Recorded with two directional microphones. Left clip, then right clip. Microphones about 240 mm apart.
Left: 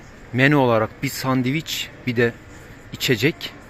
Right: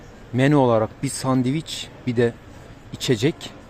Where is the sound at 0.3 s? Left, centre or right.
Centre.